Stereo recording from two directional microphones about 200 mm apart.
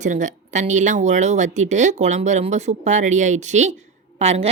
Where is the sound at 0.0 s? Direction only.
35° right (ahead or behind).